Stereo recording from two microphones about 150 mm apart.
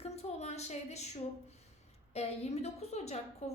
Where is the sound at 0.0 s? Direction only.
45° left (ahead or behind).